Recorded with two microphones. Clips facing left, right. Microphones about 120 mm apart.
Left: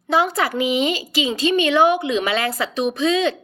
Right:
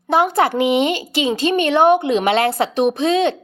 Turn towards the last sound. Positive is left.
turn(degrees=-60)  # may be behind; listen again after turning